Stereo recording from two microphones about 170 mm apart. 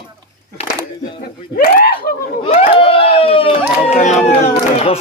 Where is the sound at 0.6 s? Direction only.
35° left (ahead or behind).